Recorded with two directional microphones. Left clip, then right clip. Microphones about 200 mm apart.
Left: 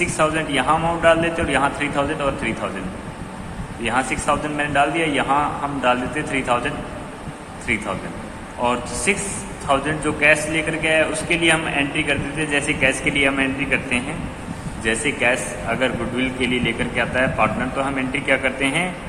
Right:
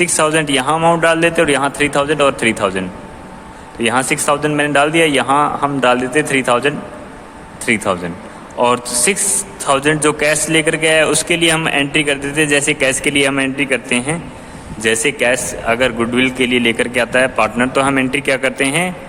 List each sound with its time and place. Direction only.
0.0 s a man's voice: 60° right (ahead or behind)
3.8 s a man's voice: 55° right (ahead or behind)